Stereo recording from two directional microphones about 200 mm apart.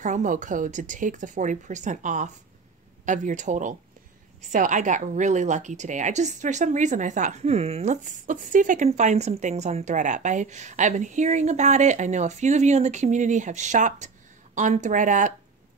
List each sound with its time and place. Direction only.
0.0 s a woman's voice: 40° right (ahead or behind)